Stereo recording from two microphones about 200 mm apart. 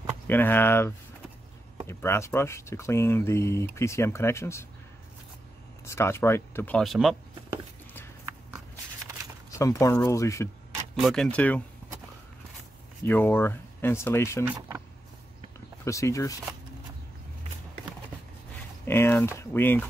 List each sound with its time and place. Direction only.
0.3 s speech: 10° left (ahead or behind)
5.9 s speech: 15° left (ahead or behind)
9.5 s speech: 15° left (ahead or behind)
11.0 s speech: centre (ahead or behind)
13.0 s speech: 10° left (ahead or behind)
14.4 s speech: 10° right (ahead or behind)
15.8 s speech: 15° left (ahead or behind)
18.9 s speech: 10° left (ahead or behind)